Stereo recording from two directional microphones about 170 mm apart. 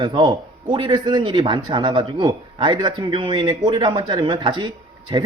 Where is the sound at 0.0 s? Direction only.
30° right (ahead or behind).